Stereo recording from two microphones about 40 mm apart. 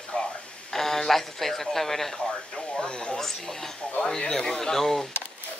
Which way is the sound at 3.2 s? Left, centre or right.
Centre.